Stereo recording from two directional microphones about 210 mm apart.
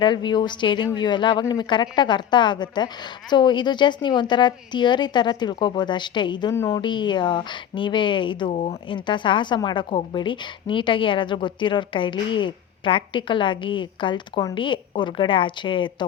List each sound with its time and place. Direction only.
0.0 s speech: 20° left (ahead or behind)